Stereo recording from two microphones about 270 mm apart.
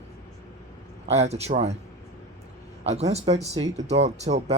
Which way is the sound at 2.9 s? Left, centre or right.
Right.